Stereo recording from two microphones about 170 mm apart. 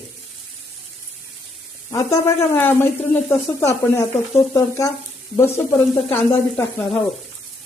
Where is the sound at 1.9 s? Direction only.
15° left (ahead or behind).